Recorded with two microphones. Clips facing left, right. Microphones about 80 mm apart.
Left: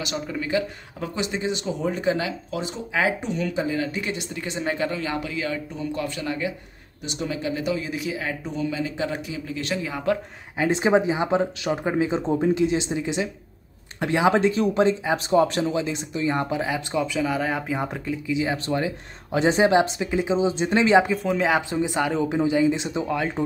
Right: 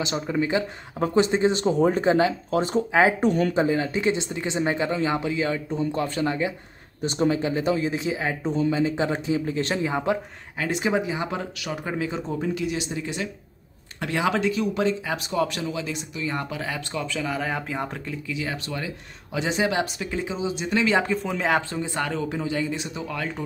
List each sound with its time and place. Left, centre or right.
0.0 s speech: right
0.9 s speech: right
2.9 s speech: right
3.2 s speech: right
10.6 s speech: left
14.3 s speech: left
21.1 s speech: centre
21.6 s speech: centre